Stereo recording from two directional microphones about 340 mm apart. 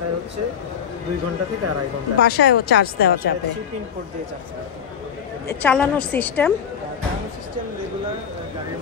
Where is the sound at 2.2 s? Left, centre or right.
Left.